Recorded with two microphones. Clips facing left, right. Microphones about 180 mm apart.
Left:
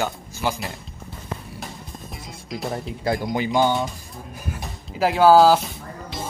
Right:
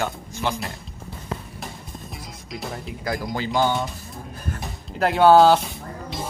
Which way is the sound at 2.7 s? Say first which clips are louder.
Left 4 dB; 30° left (ahead or behind).